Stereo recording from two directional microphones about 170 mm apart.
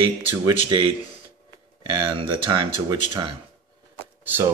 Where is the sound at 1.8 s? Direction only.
30° right (ahead or behind).